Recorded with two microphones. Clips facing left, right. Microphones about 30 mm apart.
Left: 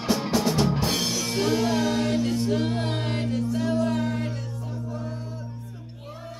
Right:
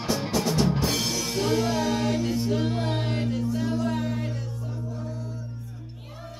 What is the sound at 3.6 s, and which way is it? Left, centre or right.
Music, left.